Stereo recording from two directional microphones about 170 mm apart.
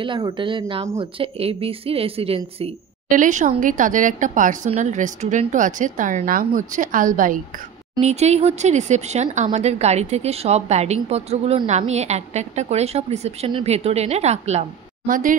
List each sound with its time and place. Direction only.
0.0 s speech: 30° right (ahead or behind)
3.1 s speech: 50° right (ahead or behind)
8.0 s speech: 40° right (ahead or behind)
15.0 s speech: 55° right (ahead or behind)